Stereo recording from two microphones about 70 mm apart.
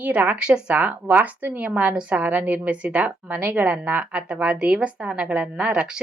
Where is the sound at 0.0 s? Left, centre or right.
Right.